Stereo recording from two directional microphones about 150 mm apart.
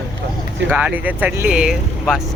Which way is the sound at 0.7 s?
10° right (ahead or behind).